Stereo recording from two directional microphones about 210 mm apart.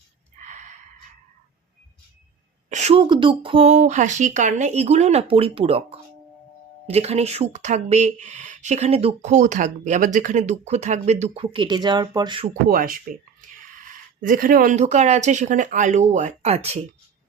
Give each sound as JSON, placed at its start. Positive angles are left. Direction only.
{"t": 0.3, "sound": "a sound", "side_deg": -35}
{"t": 2.6, "sound": "speech", "side_deg": -35}
{"t": 12.6, "sound": "speech", "side_deg": -45}